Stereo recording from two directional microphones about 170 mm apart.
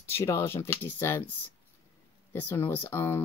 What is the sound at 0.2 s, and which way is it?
Speech, 15° left (ahead or behind).